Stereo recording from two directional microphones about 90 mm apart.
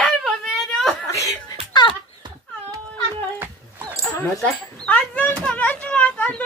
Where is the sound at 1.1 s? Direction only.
35° left (ahead or behind).